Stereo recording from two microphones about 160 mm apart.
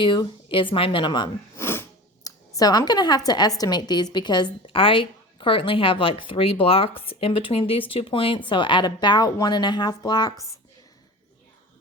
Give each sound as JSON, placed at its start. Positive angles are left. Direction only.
{"t": 0.0, "sound": "speech", "side_deg": 30}
{"t": 1.5, "sound": "a woman's voice", "side_deg": 15}